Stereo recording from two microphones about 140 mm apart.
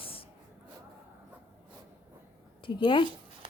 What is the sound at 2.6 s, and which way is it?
Speech, 35° left (ahead or behind).